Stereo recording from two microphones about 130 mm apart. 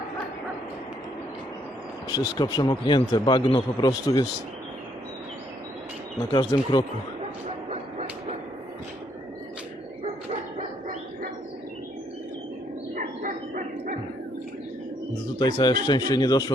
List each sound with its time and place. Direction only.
2.0 s speech: 35° left (ahead or behind)
6.3 s speech: 35° left (ahead or behind)
7.7 s bow-wow: 60° right (ahead or behind)
10.0 s bow-wow: 50° right (ahead or behind)
13.0 s a sound: 85° right
15.4 s speech: 35° left (ahead or behind)